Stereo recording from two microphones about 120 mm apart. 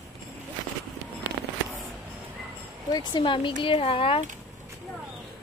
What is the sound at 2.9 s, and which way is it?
A woman's voice, 35° left (ahead or behind).